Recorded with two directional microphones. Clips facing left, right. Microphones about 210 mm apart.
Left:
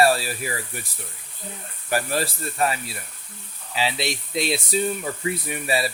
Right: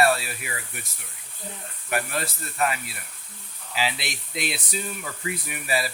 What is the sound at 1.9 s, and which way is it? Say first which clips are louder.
Speech: left 4 dB; 35° left (ahead or behind).